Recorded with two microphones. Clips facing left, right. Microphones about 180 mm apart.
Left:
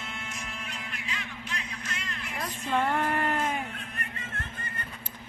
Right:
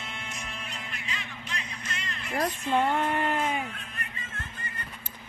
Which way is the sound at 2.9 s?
Centre (ahead or behind).